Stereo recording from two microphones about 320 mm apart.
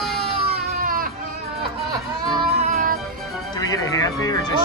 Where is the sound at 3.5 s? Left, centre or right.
Centre.